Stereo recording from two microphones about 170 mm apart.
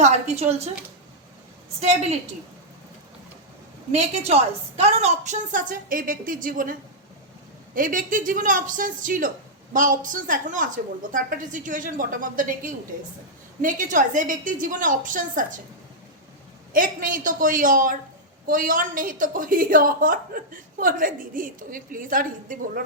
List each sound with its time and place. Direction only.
0.0 s a woman's voice: 40° right (ahead or behind)
1.8 s a woman's voice: 40° right (ahead or behind)
3.9 s a woman's voice: 40° right (ahead or behind)
7.8 s a woman's voice: 50° right (ahead or behind)
16.7 s a woman's voice: 50° right (ahead or behind)